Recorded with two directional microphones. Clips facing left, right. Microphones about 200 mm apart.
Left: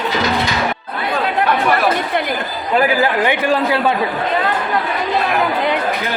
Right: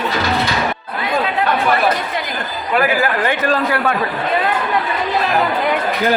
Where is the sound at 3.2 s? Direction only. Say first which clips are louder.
Left 1 dB; 15° left (ahead or behind).